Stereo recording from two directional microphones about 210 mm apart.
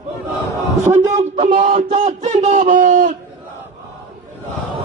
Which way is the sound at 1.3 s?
35° right (ahead or behind).